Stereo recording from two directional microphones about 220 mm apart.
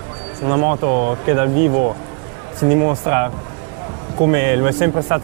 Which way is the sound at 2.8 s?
25° right (ahead or behind).